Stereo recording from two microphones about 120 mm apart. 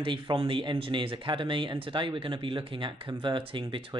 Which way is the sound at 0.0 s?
45° right (ahead or behind).